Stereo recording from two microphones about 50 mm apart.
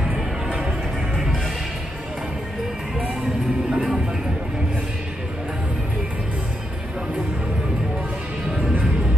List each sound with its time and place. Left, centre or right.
0.6 s music: centre
3.7 s music: centre